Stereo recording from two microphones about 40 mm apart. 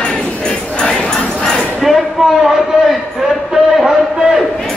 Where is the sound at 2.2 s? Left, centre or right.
Centre.